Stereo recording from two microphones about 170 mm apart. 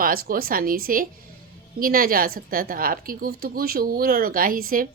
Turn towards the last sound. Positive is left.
turn(degrees=-55)  # may be behind; listen again after turning